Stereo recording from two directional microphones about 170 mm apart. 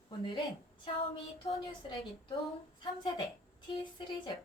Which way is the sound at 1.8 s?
30° left (ahead or behind).